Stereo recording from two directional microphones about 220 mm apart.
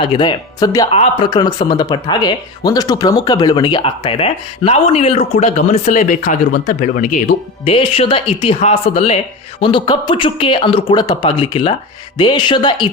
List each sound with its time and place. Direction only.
0.0 s speech: 20° left (ahead or behind)